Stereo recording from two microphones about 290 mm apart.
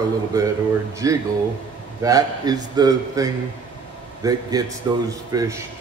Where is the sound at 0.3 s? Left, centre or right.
Centre.